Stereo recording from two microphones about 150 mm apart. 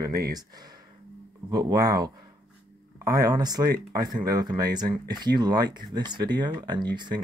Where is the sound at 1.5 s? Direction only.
25° right (ahead or behind).